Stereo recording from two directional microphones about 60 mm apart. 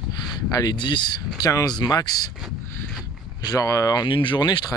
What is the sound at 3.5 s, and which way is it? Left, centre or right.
Speech, left.